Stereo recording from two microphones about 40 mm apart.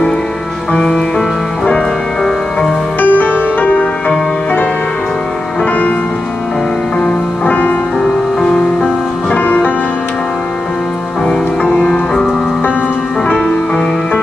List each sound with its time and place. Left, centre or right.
0.7 s music: centre
3.0 s music: left
7.4 s music: left
8.0 s music: centre
11.8 s music: centre